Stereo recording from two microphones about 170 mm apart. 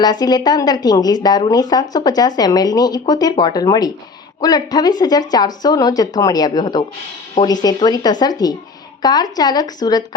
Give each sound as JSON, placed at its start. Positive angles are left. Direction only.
{"t": 0.0, "sound": "speech", "side_deg": 25}